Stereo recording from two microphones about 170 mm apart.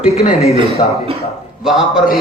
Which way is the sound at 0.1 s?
35° left (ahead or behind).